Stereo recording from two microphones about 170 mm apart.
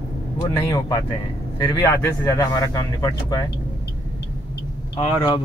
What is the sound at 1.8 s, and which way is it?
A man's voice, 15° left (ahead or behind).